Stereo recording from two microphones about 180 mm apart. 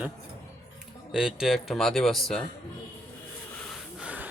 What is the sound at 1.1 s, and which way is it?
Speech, 5° right (ahead or behind).